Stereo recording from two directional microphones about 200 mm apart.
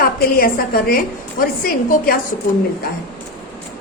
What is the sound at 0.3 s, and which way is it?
A woman's voice, 45° left (ahead or behind).